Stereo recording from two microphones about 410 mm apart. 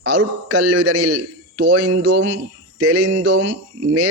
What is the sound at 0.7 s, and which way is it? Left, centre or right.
Speech, right.